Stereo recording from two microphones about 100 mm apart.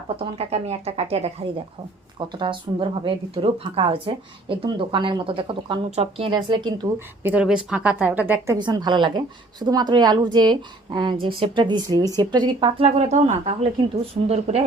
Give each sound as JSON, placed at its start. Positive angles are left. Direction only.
{"t": 0.1, "sound": "speech", "side_deg": -75}
{"t": 2.1, "sound": "speech", "side_deg": -50}
{"t": 7.2, "sound": "a woman's voice", "side_deg": -20}
{"t": 7.4, "sound": "a woman's voice", "side_deg": -10}
{"t": 8.5, "sound": "a woman's voice", "side_deg": -45}